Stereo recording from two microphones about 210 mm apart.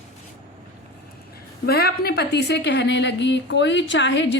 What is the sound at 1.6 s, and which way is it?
Speech, 50° left (ahead or behind).